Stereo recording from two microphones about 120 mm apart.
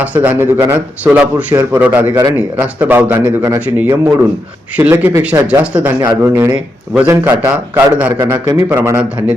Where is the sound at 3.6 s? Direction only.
15° right (ahead or behind).